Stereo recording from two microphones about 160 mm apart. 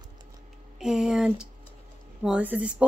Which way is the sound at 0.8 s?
5° right (ahead or behind).